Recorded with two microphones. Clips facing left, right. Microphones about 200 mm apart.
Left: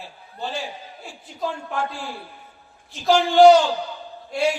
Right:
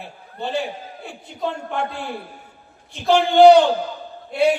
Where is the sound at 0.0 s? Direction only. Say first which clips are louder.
Right 3 dB; 60° right (ahead or behind).